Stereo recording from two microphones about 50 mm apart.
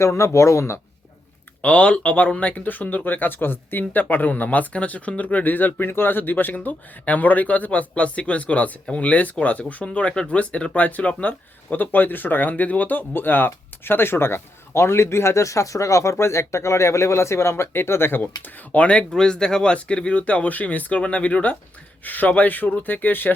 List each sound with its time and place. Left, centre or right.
0.0 s speech: left
1.6 s speech: left
18.2 s speech: left
19.1 s speech: centre
22.0 s speech: left